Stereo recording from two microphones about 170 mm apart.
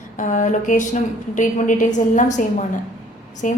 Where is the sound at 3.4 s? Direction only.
50° left (ahead or behind).